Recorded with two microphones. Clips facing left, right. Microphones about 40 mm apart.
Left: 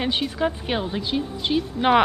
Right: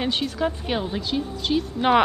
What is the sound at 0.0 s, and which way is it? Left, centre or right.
A woman's voice, centre.